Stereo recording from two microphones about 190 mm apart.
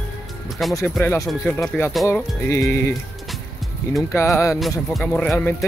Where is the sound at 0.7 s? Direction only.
15° left (ahead or behind).